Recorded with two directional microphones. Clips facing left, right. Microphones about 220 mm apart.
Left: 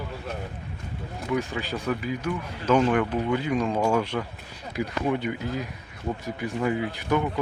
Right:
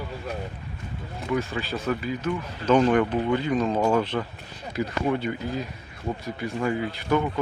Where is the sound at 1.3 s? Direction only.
15° left (ahead or behind).